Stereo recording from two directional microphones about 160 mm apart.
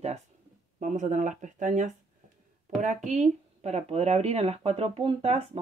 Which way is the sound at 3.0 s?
50° right (ahead or behind).